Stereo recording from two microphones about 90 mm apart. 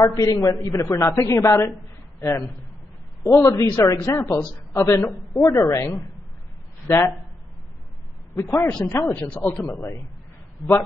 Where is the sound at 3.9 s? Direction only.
35° left (ahead or behind).